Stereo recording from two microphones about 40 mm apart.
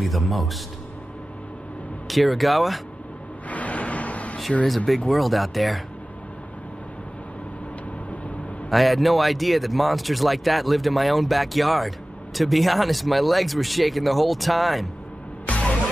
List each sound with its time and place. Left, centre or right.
0.0 s speech: centre
2.0 s speech: centre
3.4 s vehicle: left
4.6 s speech: centre
8.6 s speech: centre
15.4 s music: left